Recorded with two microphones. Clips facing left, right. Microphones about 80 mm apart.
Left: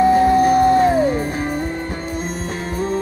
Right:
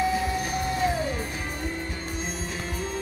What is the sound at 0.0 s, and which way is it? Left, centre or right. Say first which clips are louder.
Music: left 13 dB; left.